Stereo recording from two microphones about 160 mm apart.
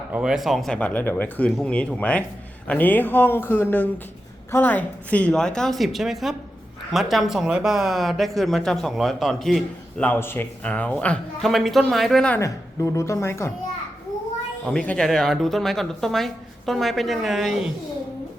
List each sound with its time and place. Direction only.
0.1 s a man's voice: 5° right (ahead or behind)
10.1 s a man's voice: 15° left (ahead or behind)
12.4 s a man's voice: 20° left (ahead or behind)
14.7 s speech: 5° left (ahead or behind)